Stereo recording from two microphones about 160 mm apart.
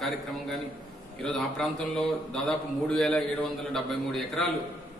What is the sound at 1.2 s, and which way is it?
A man's voice, 5° left (ahead or behind).